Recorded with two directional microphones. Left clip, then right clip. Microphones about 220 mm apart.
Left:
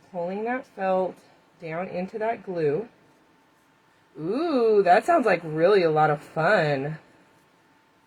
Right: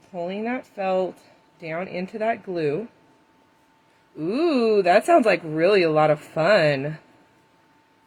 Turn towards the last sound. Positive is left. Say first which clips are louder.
# right 3 dB
turn(degrees=-45)  # may be behind; listen again after turning